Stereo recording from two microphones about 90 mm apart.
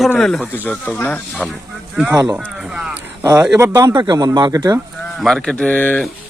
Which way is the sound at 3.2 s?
45° right (ahead or behind).